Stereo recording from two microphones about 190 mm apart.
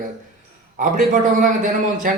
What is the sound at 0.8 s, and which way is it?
Speech, 40° right (ahead or behind).